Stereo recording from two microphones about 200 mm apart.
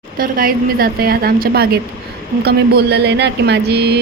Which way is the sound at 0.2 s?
45° right (ahead or behind).